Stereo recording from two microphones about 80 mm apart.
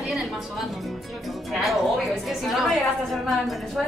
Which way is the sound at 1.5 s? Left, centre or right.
Centre.